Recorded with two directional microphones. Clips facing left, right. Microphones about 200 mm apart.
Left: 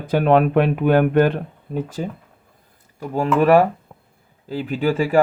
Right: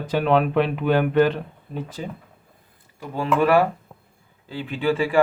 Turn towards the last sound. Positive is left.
turn(degrees=40)  # may be behind; listen again after turning